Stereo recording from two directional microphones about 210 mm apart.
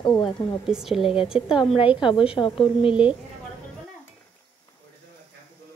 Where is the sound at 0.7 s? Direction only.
Centre (ahead or behind).